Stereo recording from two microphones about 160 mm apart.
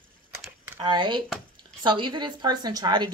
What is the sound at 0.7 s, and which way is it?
Speech, 30° right (ahead or behind).